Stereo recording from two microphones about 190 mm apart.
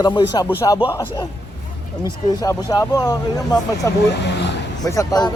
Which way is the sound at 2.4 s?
20° left (ahead or behind).